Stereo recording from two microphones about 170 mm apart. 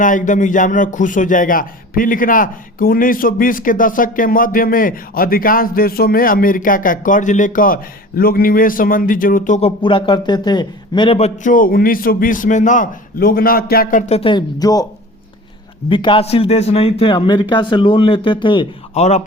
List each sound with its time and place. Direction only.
0.0 s speech: 50° left (ahead or behind)
9.6 s a man's voice: 35° left (ahead or behind)
11.4 s speech: 55° left (ahead or behind)
14.1 s a man's voice: 30° left (ahead or behind)
15.9 s a man's voice: 30° left (ahead or behind)